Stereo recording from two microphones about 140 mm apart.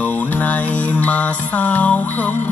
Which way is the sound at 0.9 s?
10° left (ahead or behind).